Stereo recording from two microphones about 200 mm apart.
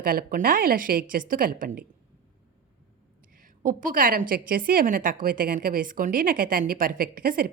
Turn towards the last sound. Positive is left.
turn(degrees=-45)  # may be behind; listen again after turning